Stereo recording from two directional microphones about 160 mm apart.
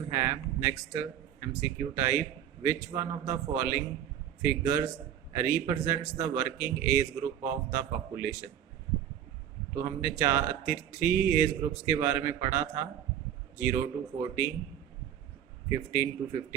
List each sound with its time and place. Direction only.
0.1 s a man's voice: 20° right (ahead or behind)
9.7 s a man's voice: 15° right (ahead or behind)
15.7 s a man's voice: 15° right (ahead or behind)